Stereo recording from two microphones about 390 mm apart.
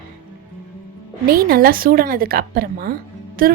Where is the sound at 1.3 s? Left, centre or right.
Right.